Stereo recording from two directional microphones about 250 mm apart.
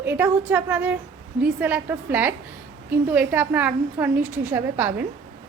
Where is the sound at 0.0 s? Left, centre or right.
Centre.